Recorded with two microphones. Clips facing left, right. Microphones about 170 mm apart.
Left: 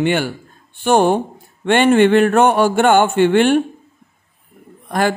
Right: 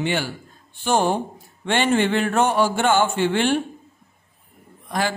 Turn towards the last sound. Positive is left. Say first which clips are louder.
# left 7 dB
turn(degrees=55)  # may be behind; listen again after turning